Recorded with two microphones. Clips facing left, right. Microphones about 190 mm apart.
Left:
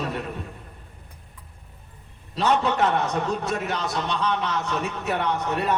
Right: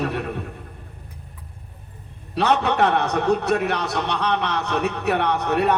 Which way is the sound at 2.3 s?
65° right (ahead or behind).